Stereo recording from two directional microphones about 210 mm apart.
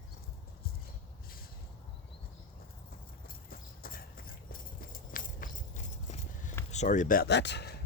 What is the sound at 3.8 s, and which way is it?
Horse, 45° left (ahead or behind).